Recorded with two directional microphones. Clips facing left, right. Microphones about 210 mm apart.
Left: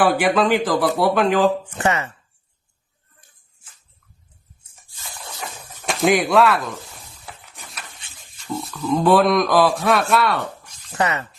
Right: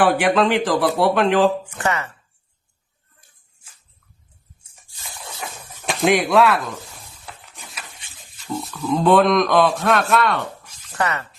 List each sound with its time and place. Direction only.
0.0 s speech: centre (ahead or behind)
1.7 s a woman's voice: 20° left (ahead or behind)
5.9 s a sound: centre (ahead or behind)
8.4 s speech: centre (ahead or behind)
10.9 s a woman's voice: 20° left (ahead or behind)